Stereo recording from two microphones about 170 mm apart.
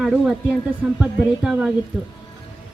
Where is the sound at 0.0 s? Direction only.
5° right (ahead or behind).